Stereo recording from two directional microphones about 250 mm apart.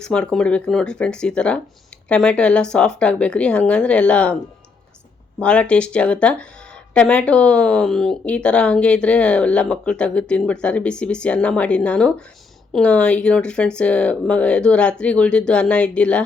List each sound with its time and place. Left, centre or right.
0.0 s speech: centre
5.4 s speech: centre